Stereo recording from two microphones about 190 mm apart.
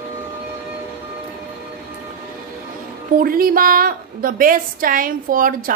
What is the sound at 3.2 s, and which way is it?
A woman's voice, 50° right (ahead or behind).